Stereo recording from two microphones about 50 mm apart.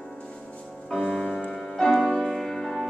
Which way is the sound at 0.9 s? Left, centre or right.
Centre.